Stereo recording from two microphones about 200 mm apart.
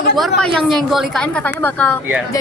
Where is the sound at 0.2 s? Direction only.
Centre (ahead or behind).